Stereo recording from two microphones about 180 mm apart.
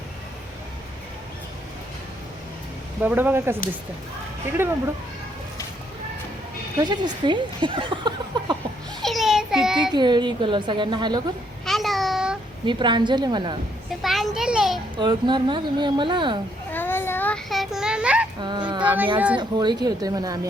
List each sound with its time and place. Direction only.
3.0 s speech: 10° right (ahead or behind)
4.6 s speech: 15° right (ahead or behind)
6.7 s speech: 25° right (ahead or behind)
9.0 s child singing: centre (ahead or behind)
9.9 s speech: 25° right (ahead or behind)
11.6 s a sound: centre (ahead or behind)
12.6 s speech: 25° right (ahead or behind)
14.0 s children playing: centre (ahead or behind)
14.9 s speech: 25° right (ahead or behind)
16.7 s child singing: 10° left (ahead or behind); by 18.3 s 5° right (ahead or behind)
18.3 s a sound: 25° right (ahead or behind)
19.4 s speech: 25° right (ahead or behind)